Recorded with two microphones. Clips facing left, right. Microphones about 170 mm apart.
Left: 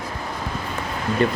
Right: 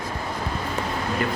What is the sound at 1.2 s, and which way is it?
Speech, 25° left (ahead or behind).